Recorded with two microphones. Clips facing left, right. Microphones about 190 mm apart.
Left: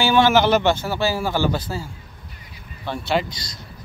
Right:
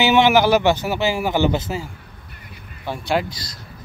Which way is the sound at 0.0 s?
20° right (ahead or behind).